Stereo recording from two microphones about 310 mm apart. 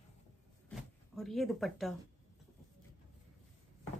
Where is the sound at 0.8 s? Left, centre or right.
Centre.